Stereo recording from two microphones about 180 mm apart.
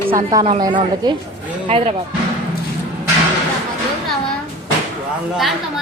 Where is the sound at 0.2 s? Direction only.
20° right (ahead or behind).